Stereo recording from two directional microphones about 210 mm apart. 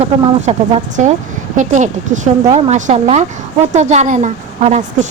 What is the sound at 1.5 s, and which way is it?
Speech, 35° right (ahead or behind).